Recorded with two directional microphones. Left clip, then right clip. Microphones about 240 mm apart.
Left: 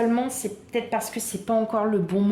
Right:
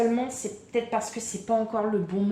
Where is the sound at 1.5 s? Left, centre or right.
Left.